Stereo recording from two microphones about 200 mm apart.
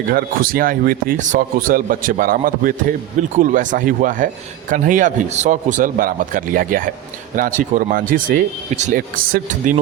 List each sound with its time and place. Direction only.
0.1 s a man's voice: 45° right (ahead or behind)